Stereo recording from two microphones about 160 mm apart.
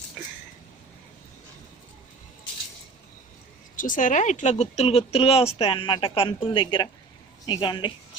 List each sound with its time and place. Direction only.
3.8 s a woman's voice: 55° left (ahead or behind); by 7.9 s 30° left (ahead or behind)